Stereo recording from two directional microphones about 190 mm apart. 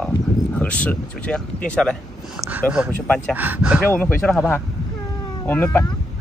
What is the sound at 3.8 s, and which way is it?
Speech, 10° left (ahead or behind).